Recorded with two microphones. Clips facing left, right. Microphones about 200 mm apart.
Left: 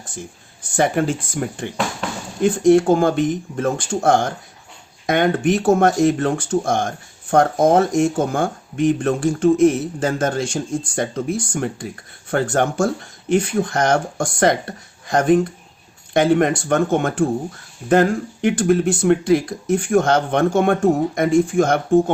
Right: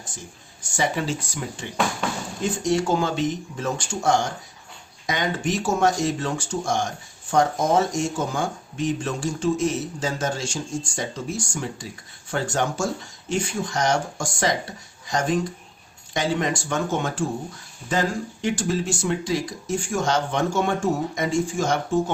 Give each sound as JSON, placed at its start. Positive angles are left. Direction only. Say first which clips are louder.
{"t": 0.6, "sound": "speech", "louder": "left 7 dB", "side_deg": 55}